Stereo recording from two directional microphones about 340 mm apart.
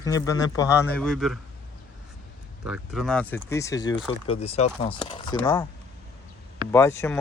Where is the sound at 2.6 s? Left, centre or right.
Centre.